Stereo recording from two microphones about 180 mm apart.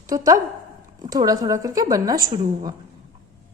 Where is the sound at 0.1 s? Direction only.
20° right (ahead or behind).